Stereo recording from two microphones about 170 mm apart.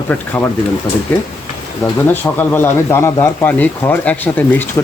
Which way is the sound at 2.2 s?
10° left (ahead or behind).